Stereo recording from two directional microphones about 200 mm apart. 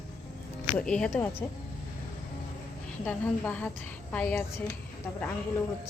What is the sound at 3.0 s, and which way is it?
A woman's voice, 5° left (ahead or behind).